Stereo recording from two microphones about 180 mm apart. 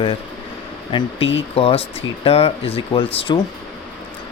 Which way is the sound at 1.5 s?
30° left (ahead or behind).